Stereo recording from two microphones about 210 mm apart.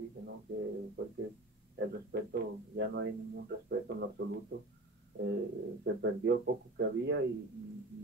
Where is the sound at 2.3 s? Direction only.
50° right (ahead or behind).